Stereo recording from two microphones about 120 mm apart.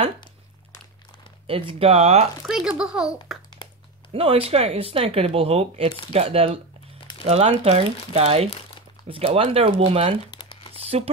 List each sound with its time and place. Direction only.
1.5 s speech: 50° right (ahead or behind)
2.4 s a child's voice: 5° right (ahead or behind)
4.1 s speech: 50° right (ahead or behind)
10.3 s crumpling: 40° left (ahead or behind)
10.7 s a sound: 55° right (ahead or behind)